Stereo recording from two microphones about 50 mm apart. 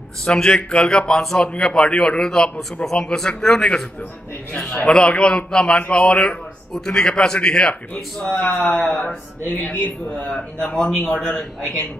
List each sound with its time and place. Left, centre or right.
0.2 s a man's voice: centre
4.6 s a man's voice: left
7.9 s a man's voice: left